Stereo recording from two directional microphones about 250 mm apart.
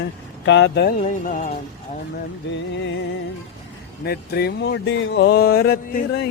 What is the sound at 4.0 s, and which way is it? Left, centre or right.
Speech, left.